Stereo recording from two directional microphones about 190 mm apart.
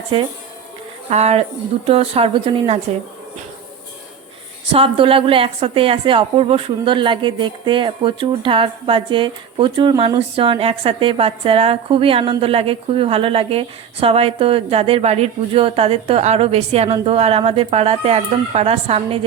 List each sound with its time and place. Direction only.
0.1 s a woman's voice: 30° right (ahead or behind)
4.7 s a woman's voice: 30° right (ahead or behind)